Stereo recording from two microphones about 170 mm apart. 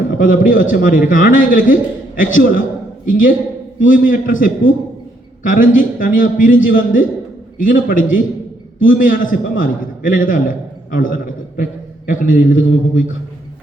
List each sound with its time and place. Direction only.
0.2 s a man's voice: 50° left (ahead or behind)